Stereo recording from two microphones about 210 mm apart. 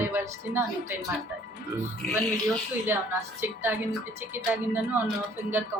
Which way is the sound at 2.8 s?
10° right (ahead or behind).